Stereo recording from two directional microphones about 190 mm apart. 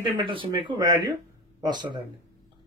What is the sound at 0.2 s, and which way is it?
Speech, 25° right (ahead or behind).